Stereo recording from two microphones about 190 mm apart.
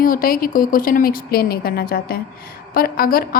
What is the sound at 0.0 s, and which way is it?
A woman's voice, 50° left (ahead or behind).